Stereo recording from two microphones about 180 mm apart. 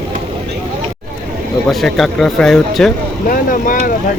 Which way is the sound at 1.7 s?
Centre (ahead or behind).